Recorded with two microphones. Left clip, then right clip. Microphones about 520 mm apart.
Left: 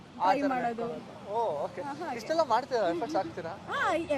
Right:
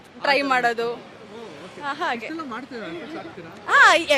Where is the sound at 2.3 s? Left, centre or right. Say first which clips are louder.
Left 6 dB; left.